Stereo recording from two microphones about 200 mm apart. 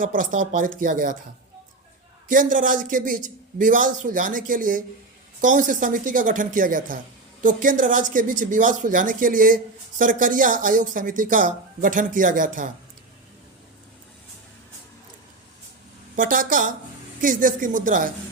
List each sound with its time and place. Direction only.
0.0 s speech: 40° right (ahead or behind)
2.3 s a man's voice: 40° right (ahead or behind)
16.1 s a man's voice: 45° right (ahead or behind)